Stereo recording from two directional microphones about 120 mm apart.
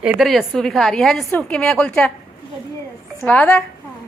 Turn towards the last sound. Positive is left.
turn(degrees=15)  # may be behind; listen again after turning